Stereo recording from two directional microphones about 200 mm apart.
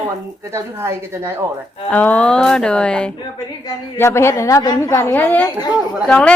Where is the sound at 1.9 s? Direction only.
10° left (ahead or behind).